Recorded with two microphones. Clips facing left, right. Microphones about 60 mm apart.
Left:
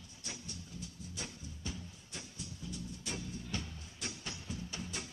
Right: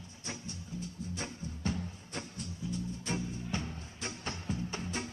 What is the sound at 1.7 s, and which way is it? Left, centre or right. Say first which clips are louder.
Music: right 8 dB; right.